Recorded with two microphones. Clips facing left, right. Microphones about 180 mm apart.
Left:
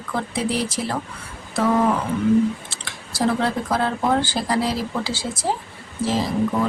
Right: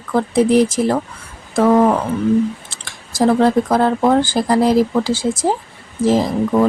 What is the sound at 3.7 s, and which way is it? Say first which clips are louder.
Speech: right 7 dB; 50° right (ahead or behind).